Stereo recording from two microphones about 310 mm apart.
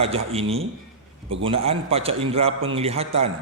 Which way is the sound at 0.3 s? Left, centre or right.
Centre.